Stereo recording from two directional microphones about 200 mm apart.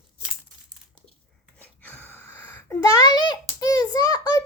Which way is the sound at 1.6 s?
10° left (ahead or behind).